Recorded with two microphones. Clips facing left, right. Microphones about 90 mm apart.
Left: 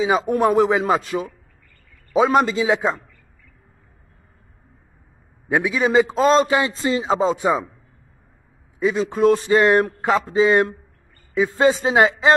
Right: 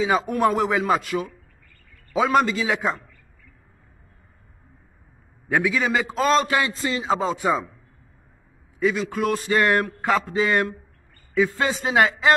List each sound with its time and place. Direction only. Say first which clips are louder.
0.0 s a man's voice: left 2 dB; 20° left (ahead or behind)
5.5 s a man's voice: left 3 dB; 20° left (ahead or behind)
8.7 s a man's voice: left 3 dB; 25° left (ahead or behind)